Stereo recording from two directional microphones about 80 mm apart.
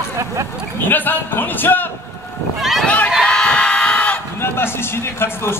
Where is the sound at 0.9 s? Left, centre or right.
Left.